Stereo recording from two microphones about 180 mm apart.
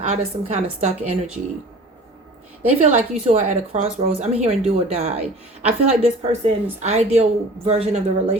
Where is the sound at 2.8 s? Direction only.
40° right (ahead or behind).